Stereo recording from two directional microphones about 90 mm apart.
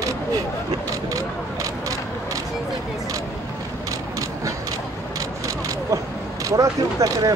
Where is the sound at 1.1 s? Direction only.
40° right (ahead or behind).